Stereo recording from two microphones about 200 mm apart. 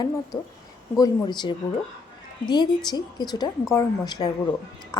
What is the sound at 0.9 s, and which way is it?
A woman's voice, 20° left (ahead or behind).